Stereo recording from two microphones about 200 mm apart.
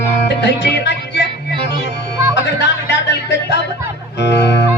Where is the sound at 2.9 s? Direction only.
60° left (ahead or behind).